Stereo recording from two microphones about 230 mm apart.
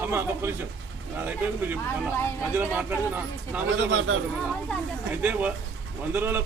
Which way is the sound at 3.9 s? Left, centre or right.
Right.